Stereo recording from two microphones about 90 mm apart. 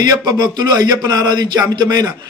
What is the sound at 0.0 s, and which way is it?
A man's voice, 45° right (ahead or behind).